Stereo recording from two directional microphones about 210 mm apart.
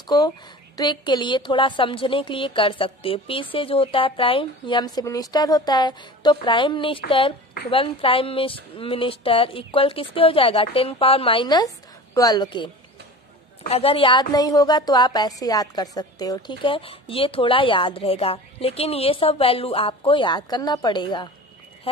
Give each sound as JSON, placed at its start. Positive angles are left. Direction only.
{"t": 0.0, "sound": "a woman's voice", "side_deg": 20}
{"t": 13.7, "sound": "a woman's voice", "side_deg": 25}